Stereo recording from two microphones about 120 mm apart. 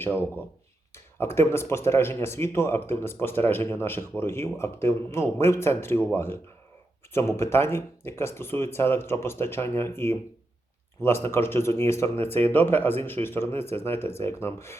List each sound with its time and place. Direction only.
0.0 s speech: 15° left (ahead or behind)